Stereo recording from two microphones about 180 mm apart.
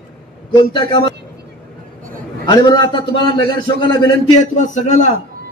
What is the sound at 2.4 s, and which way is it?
A man's voice, 25° left (ahead or behind).